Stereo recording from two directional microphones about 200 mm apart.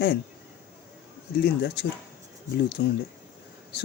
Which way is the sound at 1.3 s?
55° left (ahead or behind).